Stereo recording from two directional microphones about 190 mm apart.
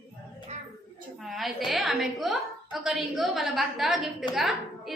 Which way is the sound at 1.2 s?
Centre (ahead or behind).